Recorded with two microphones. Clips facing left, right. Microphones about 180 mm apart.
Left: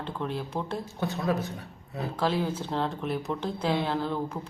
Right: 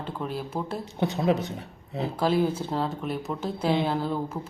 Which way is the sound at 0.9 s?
20° right (ahead or behind).